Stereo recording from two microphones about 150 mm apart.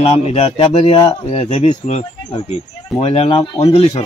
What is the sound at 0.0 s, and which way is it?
Speech, 45° left (ahead or behind).